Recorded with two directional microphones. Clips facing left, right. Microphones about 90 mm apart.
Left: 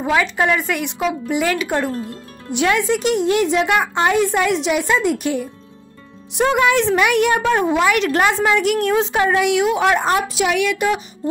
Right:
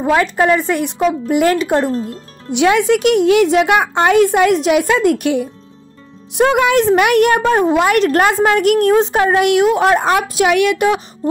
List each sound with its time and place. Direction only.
0.1 s a woman's voice: 35° right (ahead or behind)
1.3 s a woman's voice: 50° right (ahead or behind)
2.5 s a woman's voice: 85° right; by 5.4 s 60° right (ahead or behind)
6.4 s a woman's voice: 60° right (ahead or behind)